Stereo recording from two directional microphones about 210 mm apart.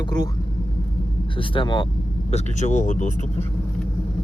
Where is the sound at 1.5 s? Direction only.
25° left (ahead or behind).